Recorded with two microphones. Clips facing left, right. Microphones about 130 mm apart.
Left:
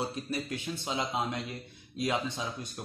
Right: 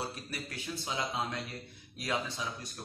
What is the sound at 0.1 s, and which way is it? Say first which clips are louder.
Speech: left 7 dB; 20° left (ahead or behind).